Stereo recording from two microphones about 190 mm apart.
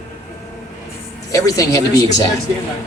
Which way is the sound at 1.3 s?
20° left (ahead or behind).